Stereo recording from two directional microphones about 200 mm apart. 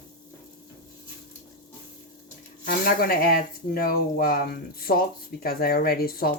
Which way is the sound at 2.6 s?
45° left (ahead or behind).